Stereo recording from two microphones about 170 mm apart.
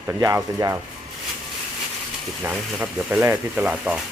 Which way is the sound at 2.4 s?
10° right (ahead or behind).